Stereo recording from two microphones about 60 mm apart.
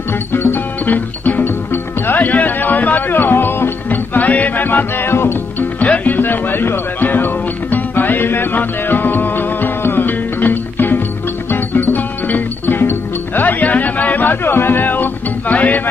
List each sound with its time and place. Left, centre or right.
0.3 s music: left